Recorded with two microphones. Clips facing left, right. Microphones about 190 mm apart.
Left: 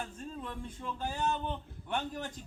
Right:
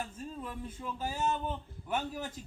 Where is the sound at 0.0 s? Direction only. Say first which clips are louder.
Right 1 dB; 5° right (ahead or behind).